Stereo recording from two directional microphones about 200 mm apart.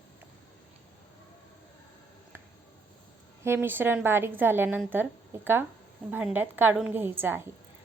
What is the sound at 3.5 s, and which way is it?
A woman's voice, 10° right (ahead or behind).